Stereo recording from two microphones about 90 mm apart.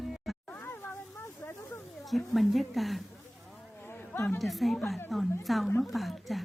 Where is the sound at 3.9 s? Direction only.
25° left (ahead or behind).